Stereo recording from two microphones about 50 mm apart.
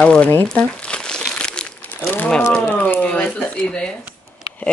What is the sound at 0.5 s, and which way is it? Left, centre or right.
Crumpling, left.